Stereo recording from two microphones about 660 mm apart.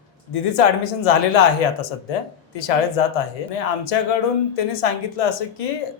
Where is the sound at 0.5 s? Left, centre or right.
Left.